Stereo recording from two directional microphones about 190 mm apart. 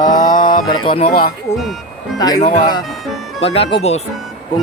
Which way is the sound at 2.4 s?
40° left (ahead or behind).